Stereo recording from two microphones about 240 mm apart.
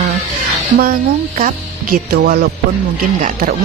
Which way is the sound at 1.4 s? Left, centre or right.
Right.